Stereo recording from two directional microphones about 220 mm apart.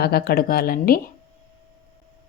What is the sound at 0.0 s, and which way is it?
Speech, 45° left (ahead or behind).